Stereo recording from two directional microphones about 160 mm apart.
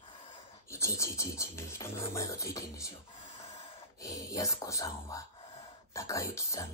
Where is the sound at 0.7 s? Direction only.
15° left (ahead or behind).